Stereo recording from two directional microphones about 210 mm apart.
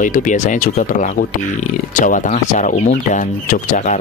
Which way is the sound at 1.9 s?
40° left (ahead or behind).